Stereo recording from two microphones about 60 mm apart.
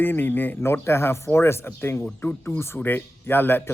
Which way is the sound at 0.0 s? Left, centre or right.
Left.